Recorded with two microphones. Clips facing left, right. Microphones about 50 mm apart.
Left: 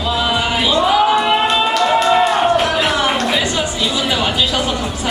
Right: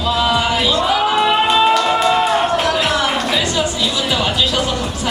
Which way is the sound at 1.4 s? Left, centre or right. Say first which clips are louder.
Right 1 dB; centre.